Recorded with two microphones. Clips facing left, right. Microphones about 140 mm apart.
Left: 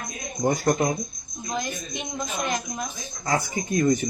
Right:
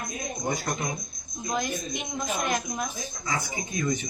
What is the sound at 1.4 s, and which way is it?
A woman's voice, 10° right (ahead or behind).